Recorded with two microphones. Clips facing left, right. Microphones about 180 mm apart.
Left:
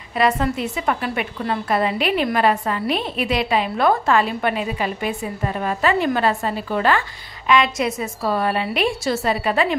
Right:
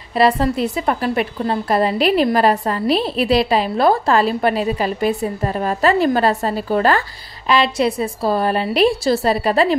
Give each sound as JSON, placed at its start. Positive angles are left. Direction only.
{"t": 0.1, "sound": "a woman's voice", "side_deg": -35}